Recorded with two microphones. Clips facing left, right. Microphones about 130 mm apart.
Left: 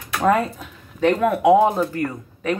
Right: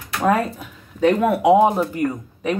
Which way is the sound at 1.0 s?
10° right (ahead or behind).